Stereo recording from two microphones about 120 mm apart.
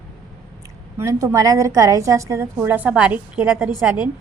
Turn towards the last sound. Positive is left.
turn(degrees=-10)  # may be behind; listen again after turning